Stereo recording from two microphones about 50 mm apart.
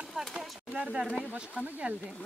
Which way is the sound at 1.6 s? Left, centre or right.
Right.